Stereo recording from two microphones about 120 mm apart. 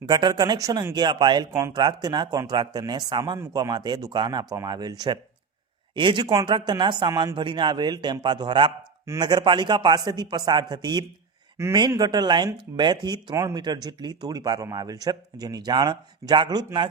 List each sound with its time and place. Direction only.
0.1 s a man's voice: 35° right (ahead or behind)